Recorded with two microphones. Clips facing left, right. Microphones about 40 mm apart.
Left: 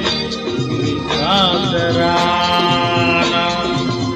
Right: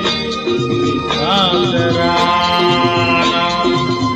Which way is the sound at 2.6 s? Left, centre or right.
Right.